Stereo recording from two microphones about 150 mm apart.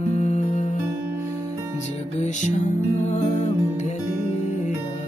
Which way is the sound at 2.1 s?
50° left (ahead or behind).